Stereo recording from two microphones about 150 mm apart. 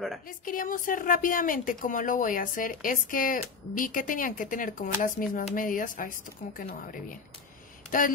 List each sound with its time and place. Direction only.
0.5 s a woman's voice: 65° left (ahead or behind)